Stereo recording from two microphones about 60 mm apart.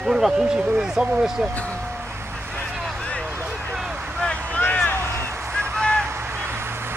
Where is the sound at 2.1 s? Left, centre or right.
Right.